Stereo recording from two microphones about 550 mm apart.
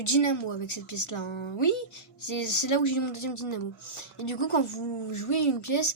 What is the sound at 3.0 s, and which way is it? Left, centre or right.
Speech, left.